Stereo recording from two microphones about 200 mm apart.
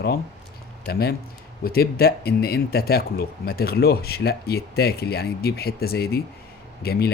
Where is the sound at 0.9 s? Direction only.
50° left (ahead or behind).